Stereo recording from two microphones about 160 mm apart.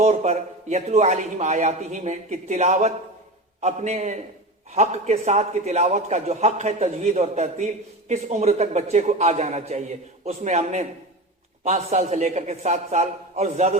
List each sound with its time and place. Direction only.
0.0 s a man's voice: 45° right (ahead or behind)